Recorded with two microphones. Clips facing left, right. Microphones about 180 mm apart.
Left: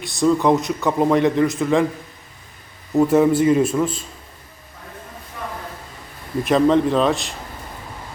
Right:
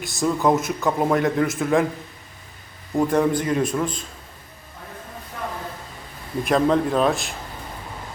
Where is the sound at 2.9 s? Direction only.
5° left (ahead or behind).